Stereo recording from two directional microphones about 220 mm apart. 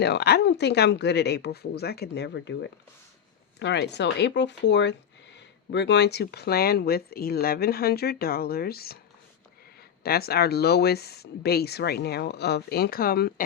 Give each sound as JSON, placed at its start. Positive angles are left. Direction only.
{"t": 0.0, "sound": "speech", "side_deg": 50}
{"t": 10.0, "sound": "speech", "side_deg": 45}